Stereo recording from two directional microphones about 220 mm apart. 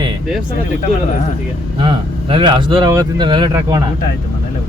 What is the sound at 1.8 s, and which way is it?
Speech, 25° right (ahead or behind).